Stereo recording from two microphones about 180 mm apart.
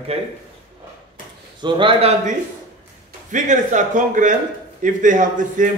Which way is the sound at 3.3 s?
45° right (ahead or behind).